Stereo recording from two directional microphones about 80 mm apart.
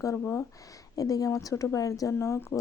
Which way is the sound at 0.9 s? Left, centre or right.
Left.